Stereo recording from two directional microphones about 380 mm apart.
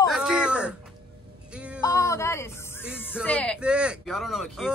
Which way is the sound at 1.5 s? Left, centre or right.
Centre.